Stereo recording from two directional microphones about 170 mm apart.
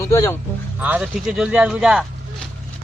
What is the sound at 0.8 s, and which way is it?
Speech, 5° right (ahead or behind).